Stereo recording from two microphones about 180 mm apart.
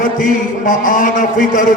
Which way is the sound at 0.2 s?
45° left (ahead or behind).